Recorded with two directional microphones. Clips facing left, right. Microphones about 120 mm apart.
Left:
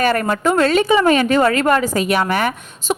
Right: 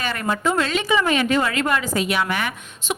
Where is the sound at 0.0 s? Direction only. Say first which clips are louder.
Left 6 dB; 50° left (ahead or behind).